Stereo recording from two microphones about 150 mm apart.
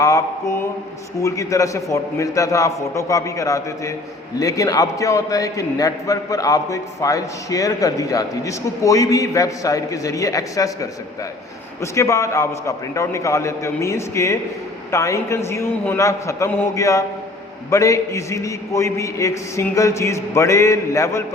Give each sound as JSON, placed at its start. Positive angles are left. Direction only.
{"t": 0.0, "sound": "mantra", "side_deg": 20}
{"t": 1.2, "sound": "a man's voice", "side_deg": 20}